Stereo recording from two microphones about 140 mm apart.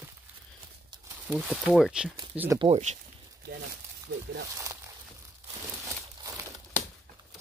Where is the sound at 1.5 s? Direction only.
Centre (ahead or behind).